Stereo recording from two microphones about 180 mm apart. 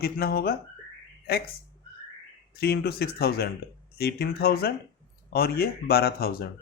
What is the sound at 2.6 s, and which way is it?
Speech, 60° left (ahead or behind).